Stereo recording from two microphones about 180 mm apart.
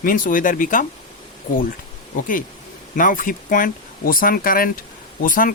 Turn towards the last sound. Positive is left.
turn(degrees=50)  # may be behind; listen again after turning